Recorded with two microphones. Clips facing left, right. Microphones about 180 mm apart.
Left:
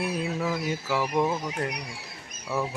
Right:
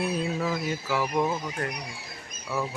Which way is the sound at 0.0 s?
5° left (ahead or behind).